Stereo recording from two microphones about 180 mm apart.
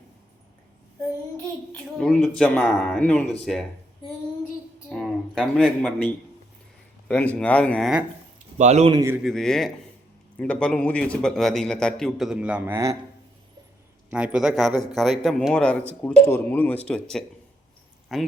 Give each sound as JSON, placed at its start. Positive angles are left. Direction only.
{"t": 2.0, "sound": "a man's voice", "side_deg": 0}
{"t": 4.9, "sound": "speech", "side_deg": 0}
{"t": 7.1, "sound": "speech", "side_deg": 5}
{"t": 8.5, "sound": "speech", "side_deg": -40}
{"t": 9.0, "sound": "speech", "side_deg": -15}
{"t": 9.2, "sound": "a man's voice", "side_deg": 0}
{"t": 14.1, "sound": "a man's voice", "side_deg": -5}